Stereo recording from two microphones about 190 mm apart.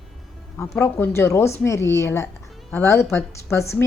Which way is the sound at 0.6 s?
15° left (ahead or behind).